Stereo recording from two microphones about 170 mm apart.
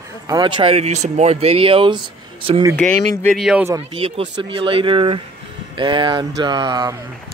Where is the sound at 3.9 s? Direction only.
30° right (ahead or behind).